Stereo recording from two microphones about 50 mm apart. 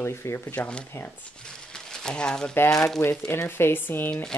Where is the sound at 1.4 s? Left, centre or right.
Centre.